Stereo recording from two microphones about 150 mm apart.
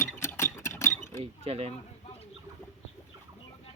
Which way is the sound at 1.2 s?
40° right (ahead or behind).